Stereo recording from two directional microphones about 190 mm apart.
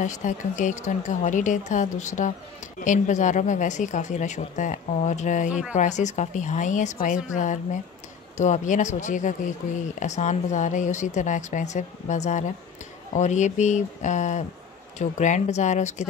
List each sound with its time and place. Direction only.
0.0 s speech: 40° left (ahead or behind)
5.5 s speech: 5° right (ahead or behind)
5.8 s speech: 40° left (ahead or behind)